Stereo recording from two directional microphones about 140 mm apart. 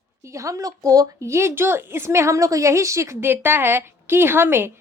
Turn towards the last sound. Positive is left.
turn(degrees=-15)  # may be behind; listen again after turning